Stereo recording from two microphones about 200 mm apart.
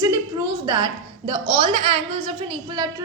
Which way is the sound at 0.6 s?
20° right (ahead or behind).